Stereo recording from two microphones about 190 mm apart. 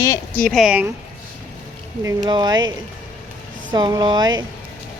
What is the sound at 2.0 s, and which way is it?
Speech, 20° right (ahead or behind).